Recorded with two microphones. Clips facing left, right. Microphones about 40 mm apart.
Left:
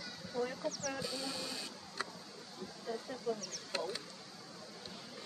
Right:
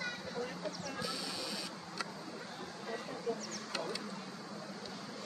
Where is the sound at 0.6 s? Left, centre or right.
Centre.